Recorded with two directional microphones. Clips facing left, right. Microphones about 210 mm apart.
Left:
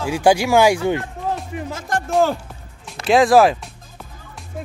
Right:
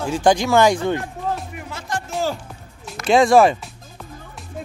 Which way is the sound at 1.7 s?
50° left (ahead or behind).